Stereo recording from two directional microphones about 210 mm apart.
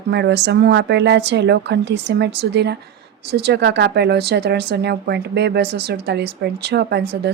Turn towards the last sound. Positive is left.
turn(degrees=-50)  # may be behind; listen again after turning